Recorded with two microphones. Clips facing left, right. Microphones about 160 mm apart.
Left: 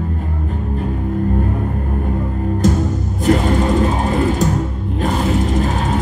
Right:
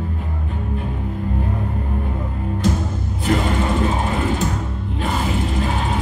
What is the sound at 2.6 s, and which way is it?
Music, 45° left (ahead or behind).